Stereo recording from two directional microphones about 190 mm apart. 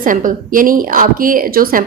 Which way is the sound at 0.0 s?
45° right (ahead or behind).